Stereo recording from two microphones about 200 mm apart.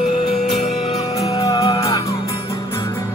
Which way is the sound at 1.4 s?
20° left (ahead or behind).